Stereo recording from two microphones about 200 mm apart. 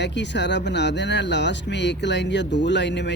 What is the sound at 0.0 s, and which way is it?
Speech, 60° left (ahead or behind).